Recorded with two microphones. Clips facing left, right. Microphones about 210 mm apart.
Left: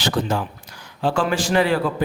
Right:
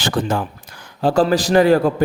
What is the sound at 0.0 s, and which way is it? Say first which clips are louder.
Speech: right 2 dB; 50° right (ahead or behind).